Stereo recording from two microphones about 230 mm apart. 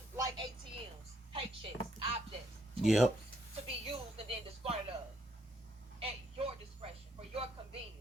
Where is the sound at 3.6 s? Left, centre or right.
Right.